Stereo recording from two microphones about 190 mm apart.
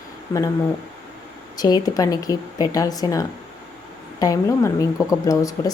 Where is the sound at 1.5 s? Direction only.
20° left (ahead or behind).